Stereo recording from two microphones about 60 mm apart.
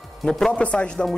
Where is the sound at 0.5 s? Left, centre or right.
Centre.